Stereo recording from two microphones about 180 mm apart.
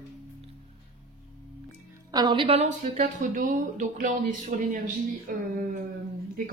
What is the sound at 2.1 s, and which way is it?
A woman's voice, 25° right (ahead or behind).